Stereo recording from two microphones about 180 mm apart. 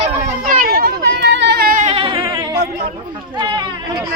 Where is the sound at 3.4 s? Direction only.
25° right (ahead or behind).